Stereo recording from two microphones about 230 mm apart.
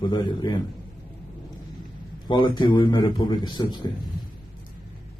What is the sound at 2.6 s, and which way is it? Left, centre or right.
A man's voice, centre.